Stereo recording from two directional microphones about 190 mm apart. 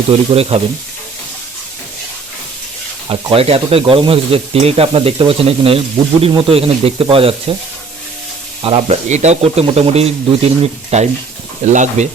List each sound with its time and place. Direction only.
0.1 s speech: 35° right (ahead or behind)
3.1 s speech: 30° right (ahead or behind)
8.6 s speech: 30° right (ahead or behind)